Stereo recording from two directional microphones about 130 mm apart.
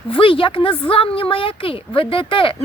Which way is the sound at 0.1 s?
45° left (ahead or behind).